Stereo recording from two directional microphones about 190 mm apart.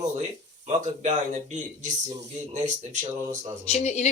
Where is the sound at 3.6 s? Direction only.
35° left (ahead or behind).